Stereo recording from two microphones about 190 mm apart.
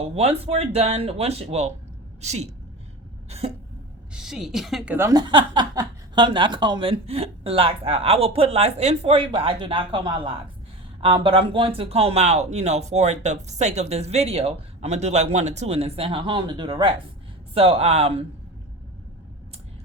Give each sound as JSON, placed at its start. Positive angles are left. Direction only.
{"t": 0.0, "sound": "speech", "side_deg": -30}
{"t": 3.2, "sound": "cough", "side_deg": -35}
{"t": 4.1, "sound": "speech", "side_deg": -5}
{"t": 4.9, "sound": "speech", "side_deg": -20}